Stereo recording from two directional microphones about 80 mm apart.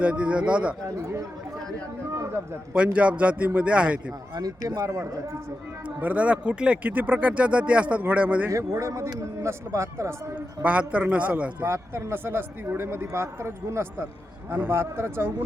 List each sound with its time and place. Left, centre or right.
0.0 s speech: centre
0.9 s speech: right
2.7 s speech: centre
4.4 s speech: right
6.0 s speech: centre
8.4 s speech: right
10.3 s speech: centre
11.6 s speech: right